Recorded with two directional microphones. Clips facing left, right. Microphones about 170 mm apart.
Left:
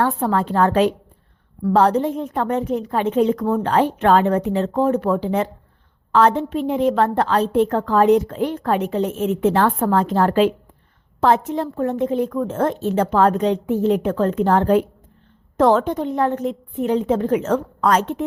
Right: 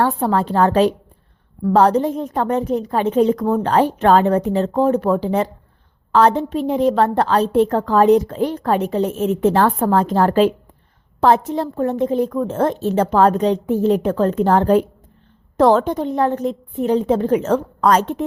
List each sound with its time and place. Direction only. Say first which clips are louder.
0.0 s a woman's voice: right 2 dB; 30° right (ahead or behind)